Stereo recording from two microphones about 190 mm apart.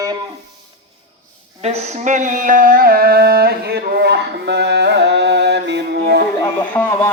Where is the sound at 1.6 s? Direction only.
35° right (ahead or behind); by 6.2 s 60° right (ahead or behind).